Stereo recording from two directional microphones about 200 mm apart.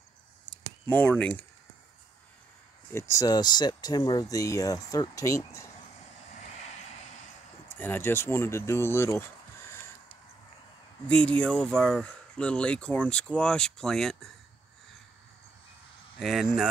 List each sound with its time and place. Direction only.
0.8 s speech: 5° left (ahead or behind)
2.9 s speech: 15° left (ahead or behind)
7.6 s speech: 10° left (ahead or behind)
11.1 s speech: 5° left (ahead or behind)
16.2 s speech: centre (ahead or behind)